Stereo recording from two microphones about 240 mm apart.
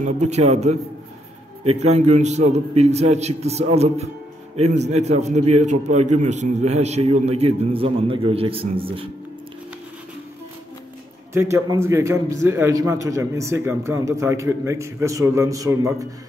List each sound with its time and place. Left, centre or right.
0.0 s a man's voice: right
11.3 s a man's voice: centre